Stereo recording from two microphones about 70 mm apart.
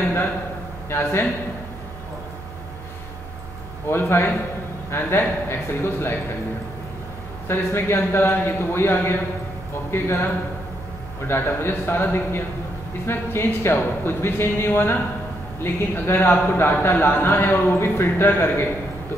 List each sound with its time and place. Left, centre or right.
0.8 s speech: left
3.8 s speech: left
7.4 s speech: left